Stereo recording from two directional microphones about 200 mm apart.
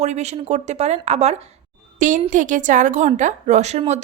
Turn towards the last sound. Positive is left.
turn(degrees=-35)  # may be behind; listen again after turning